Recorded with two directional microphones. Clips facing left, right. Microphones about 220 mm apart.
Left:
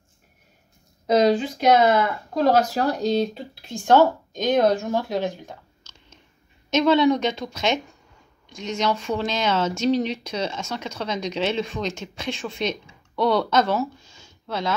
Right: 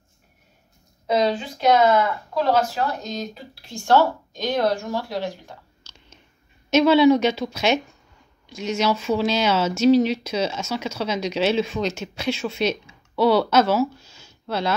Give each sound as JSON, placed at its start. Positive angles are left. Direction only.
{"t": 1.0, "sound": "a sound", "side_deg": 40}
{"t": 2.4, "sound": "speech", "side_deg": 40}
{"t": 3.6, "sound": "a woman's voice", "side_deg": 15}
{"t": 6.7, "sound": "speech", "side_deg": -10}